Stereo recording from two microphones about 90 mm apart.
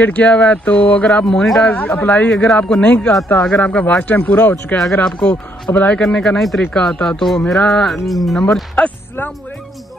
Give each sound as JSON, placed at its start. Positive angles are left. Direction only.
{"t": 0.0, "sound": "speech", "side_deg": 15}
{"t": 1.2, "sound": "speech", "side_deg": 5}
{"t": 1.7, "sound": "speech", "side_deg": 20}
{"t": 2.3, "sound": "speech", "side_deg": 5}
{"t": 8.7, "sound": "speech", "side_deg": 20}